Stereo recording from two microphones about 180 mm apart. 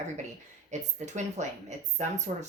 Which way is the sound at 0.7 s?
40° right (ahead or behind).